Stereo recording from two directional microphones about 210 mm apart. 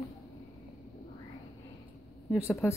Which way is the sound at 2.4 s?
15° left (ahead or behind).